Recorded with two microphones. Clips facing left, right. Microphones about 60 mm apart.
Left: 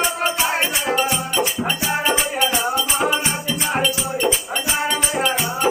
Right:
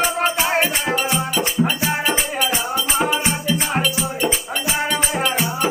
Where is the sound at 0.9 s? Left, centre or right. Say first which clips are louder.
Even; centre.